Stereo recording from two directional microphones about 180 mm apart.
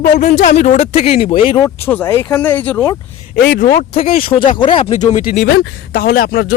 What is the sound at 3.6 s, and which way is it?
Speech, 45° left (ahead or behind).